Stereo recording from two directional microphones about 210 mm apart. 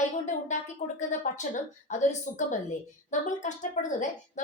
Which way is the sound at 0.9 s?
35° left (ahead or behind).